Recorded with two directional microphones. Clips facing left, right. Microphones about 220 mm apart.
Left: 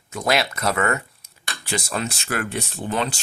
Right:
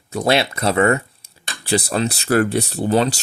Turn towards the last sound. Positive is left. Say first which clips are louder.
# right 8 dB
turn(degrees=-40)  # may be behind; listen again after turning